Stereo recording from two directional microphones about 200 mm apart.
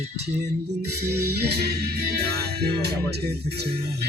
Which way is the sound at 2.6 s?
55° right (ahead or behind).